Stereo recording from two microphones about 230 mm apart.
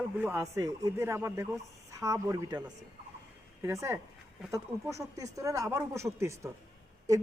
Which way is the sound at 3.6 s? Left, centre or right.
Centre.